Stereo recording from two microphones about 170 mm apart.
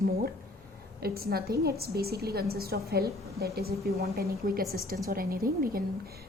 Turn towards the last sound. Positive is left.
turn(degrees=-60)  # may be behind; listen again after turning